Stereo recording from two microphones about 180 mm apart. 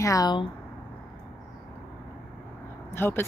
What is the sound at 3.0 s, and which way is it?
Speech, 15° left (ahead or behind).